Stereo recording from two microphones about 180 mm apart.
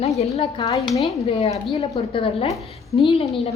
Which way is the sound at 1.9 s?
30° left (ahead or behind).